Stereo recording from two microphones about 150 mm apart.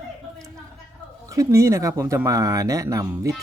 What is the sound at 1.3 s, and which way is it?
Speech, 20° right (ahead or behind).